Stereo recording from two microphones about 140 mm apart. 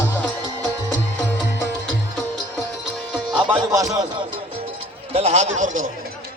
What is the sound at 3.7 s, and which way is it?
Speech, 25° right (ahead or behind).